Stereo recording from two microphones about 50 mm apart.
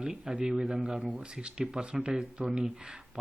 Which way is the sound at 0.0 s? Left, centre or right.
Centre.